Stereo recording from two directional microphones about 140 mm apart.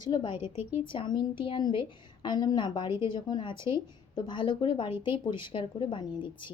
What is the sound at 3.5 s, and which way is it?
Speech, 20° right (ahead or behind).